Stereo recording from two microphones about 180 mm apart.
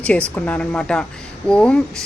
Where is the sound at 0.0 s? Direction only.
5° left (ahead or behind).